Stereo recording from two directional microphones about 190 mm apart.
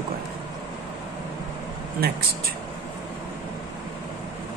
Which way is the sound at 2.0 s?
55° right (ahead or behind).